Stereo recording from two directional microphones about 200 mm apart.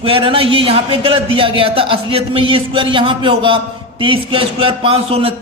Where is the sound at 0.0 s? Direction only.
25° right (ahead or behind).